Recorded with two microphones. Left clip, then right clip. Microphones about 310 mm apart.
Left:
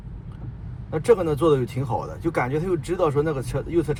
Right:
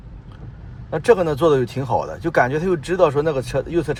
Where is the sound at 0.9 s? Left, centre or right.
Right.